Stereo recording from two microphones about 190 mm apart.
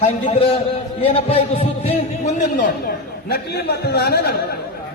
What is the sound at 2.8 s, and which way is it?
A man's voice, 55° left (ahead or behind).